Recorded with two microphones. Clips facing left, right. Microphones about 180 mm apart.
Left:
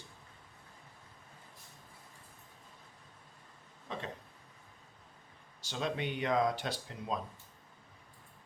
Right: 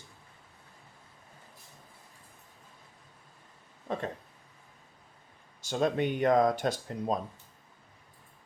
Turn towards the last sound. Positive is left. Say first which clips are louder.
# right 6 dB
turn(degrees=-45)  # may be behind; listen again after turning